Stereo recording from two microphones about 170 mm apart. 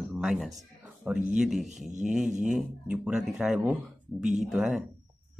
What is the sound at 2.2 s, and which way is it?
Speech, 45° right (ahead or behind).